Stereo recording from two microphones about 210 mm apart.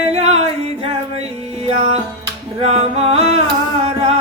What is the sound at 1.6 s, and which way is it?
Music, 30° right (ahead or behind).